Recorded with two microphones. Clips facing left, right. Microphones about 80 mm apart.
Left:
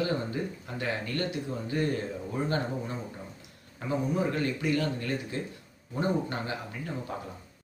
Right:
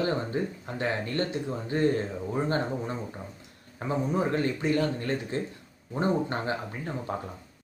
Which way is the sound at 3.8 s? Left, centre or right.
Right.